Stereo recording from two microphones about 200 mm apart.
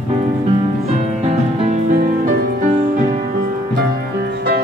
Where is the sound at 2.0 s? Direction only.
40° right (ahead or behind).